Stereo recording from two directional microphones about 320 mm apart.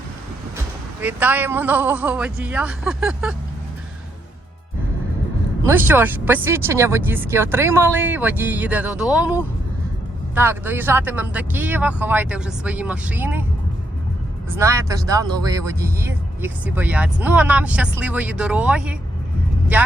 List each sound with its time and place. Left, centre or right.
1.0 s speech: centre
5.6 s speech: centre
14.6 s speech: centre